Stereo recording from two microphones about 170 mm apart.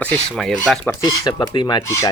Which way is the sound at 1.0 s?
25° left (ahead or behind).